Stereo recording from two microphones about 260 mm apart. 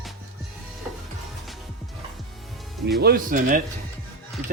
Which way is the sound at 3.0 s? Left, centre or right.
Right.